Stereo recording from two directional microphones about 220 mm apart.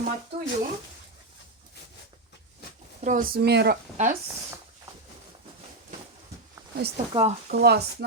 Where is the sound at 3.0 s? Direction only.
35° right (ahead or behind).